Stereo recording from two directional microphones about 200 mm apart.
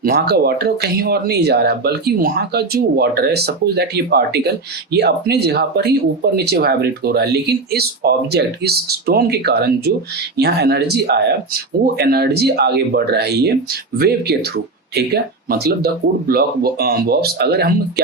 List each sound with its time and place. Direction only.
0.0 s speech: 50° right (ahead or behind)